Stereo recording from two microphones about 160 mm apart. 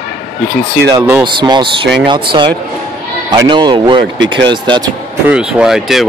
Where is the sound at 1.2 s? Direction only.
30° right (ahead or behind).